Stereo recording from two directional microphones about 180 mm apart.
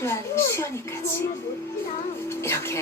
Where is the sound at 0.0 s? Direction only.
15° left (ahead or behind).